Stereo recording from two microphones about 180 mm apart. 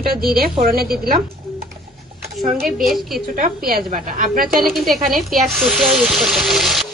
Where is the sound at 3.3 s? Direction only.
55° right (ahead or behind).